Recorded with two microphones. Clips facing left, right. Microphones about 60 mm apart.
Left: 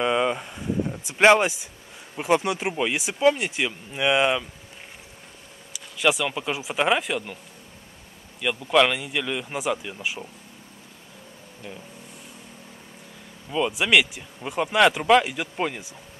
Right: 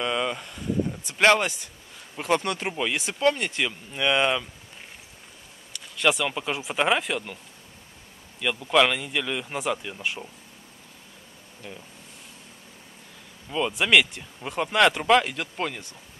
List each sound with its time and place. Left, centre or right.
0.0 s a sound: centre
2.1 s speech: centre
5.7 s speech: centre
8.4 s speech: centre
11.6 s speech: centre
13.5 s speech: centre